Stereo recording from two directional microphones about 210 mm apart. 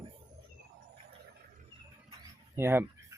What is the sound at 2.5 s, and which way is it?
Speech, 10° right (ahead or behind).